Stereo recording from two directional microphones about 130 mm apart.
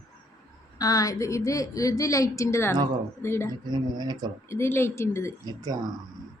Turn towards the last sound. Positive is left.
turn(degrees=-30)  # may be behind; listen again after turning